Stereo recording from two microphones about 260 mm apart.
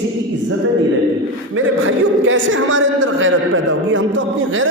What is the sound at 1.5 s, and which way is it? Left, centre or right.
A man's voice, right.